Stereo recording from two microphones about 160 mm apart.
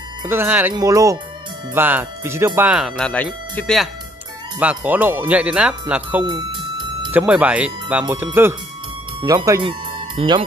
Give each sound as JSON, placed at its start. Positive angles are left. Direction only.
{"t": 0.2, "sound": "speech", "side_deg": -15}
{"t": 4.6, "sound": "speech", "side_deg": -10}
{"t": 6.2, "sound": "music", "side_deg": -30}
{"t": 7.1, "sound": "speech", "side_deg": -10}